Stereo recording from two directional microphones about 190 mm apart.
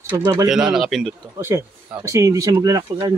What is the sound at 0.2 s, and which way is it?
Speech, 20° right (ahead or behind).